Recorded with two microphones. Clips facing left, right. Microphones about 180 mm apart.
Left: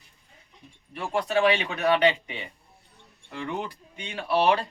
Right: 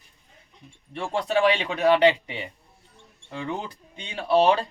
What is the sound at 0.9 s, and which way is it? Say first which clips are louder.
Speech: right 1 dB; 25° right (ahead or behind).